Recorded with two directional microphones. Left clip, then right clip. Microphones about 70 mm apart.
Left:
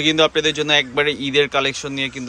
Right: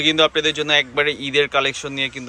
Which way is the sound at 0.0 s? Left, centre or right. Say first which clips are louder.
Even; left.